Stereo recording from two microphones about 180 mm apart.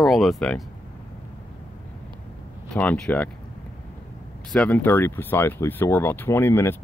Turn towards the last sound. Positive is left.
turn(degrees=15)  # may be behind; listen again after turning